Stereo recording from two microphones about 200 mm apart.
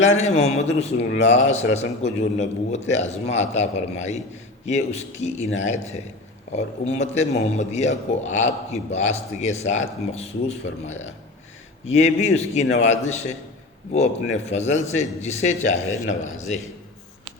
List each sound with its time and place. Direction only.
0.0 s a man's voice: 35° left (ahead or behind)